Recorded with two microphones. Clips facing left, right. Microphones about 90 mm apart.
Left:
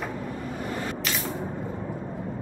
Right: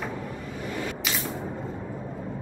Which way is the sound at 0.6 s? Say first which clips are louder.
Even; 35° left (ahead or behind).